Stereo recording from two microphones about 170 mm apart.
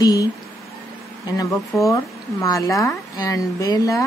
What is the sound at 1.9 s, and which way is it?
Speech, 20° left (ahead or behind).